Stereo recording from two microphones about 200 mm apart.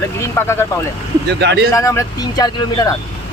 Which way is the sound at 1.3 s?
60° right (ahead or behind).